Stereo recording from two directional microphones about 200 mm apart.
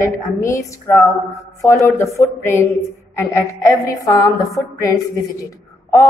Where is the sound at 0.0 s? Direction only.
15° left (ahead or behind).